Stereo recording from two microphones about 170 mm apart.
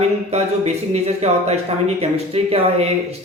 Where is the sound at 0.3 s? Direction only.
40° right (ahead or behind).